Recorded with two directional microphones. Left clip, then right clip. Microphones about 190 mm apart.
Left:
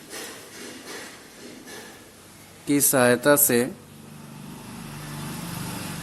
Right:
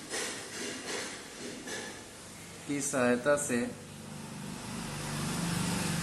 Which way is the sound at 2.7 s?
60° left (ahead or behind).